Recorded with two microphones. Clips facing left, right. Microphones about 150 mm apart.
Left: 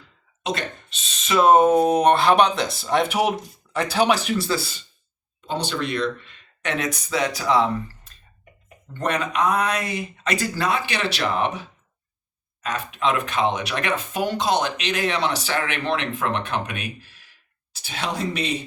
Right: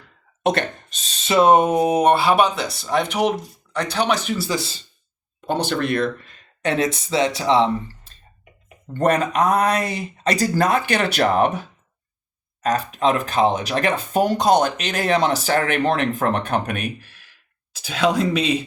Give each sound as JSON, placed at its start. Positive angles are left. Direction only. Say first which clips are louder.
{"t": 0.4, "sound": "speech", "louder": "right 7 dB", "side_deg": -50}
{"t": 4.4, "sound": "speech", "louder": "even", "side_deg": -20}
{"t": 5.5, "sound": "speech", "louder": "right 5 dB", "side_deg": -55}
{"t": 8.9, "sound": "speech", "louder": "right 6 dB", "side_deg": -45}
{"t": 12.6, "sound": "speech", "louder": "right 5 dB", "side_deg": -40}